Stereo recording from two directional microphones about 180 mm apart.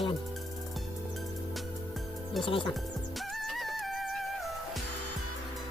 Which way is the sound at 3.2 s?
Centre (ahead or behind).